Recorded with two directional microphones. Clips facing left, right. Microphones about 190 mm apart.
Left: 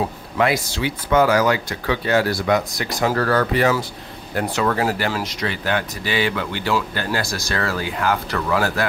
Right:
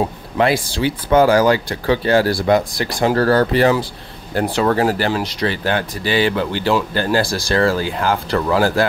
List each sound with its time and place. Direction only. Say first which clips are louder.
0.4 s speech: right 3 dB; 30° right (ahead or behind)